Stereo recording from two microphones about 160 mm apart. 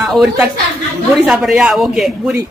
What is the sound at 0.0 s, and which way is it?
A woman's voice, centre (ahead or behind).